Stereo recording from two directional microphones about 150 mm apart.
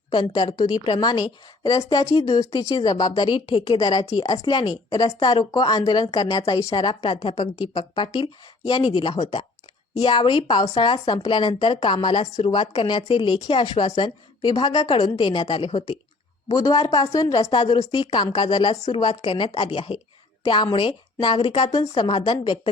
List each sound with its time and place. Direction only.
0.1 s a woman's voice: 35° left (ahead or behind)
13.9 s a woman's voice: 30° left (ahead or behind)
21.7 s a woman's voice: 25° left (ahead or behind)